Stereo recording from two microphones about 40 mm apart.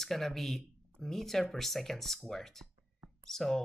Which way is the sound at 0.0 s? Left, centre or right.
Centre.